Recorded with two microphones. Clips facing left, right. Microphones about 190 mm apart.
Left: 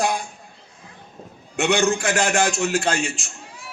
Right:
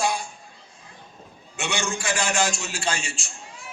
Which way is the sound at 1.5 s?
60° left (ahead or behind).